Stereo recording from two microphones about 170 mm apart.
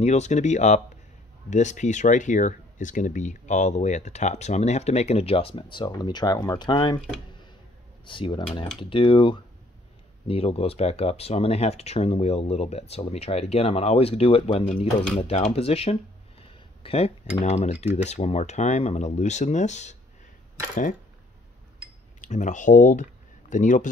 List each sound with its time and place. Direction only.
0.0 s speech: 40° left (ahead or behind); by 7.0 s 25° left (ahead or behind)
8.0 s speech: 30° left (ahead or behind)
16.4 s a sound: 35° left (ahead or behind)
17.4 s speech: 40° left (ahead or behind)
22.2 s speech: 45° left (ahead or behind)